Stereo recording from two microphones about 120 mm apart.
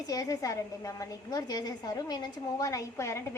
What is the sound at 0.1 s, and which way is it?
A woman's voice, 30° left (ahead or behind).